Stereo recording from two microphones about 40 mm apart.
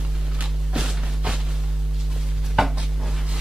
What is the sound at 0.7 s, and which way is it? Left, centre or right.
Music, centre.